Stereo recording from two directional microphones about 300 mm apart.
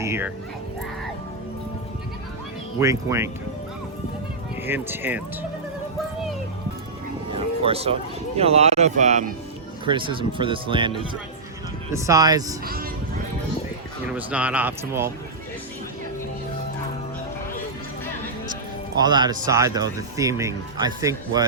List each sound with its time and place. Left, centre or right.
0.0 s speech: centre
2.7 s speech: centre
4.6 s speech: centre
7.3 s music: centre
8.4 s speech: right
12.6 s speech: right
14.2 s speech: centre
18.9 s speech: centre